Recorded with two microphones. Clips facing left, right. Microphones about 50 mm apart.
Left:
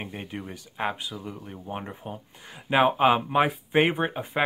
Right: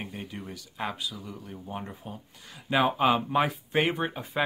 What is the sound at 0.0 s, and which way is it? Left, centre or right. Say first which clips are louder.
Speech: left 3 dB; left.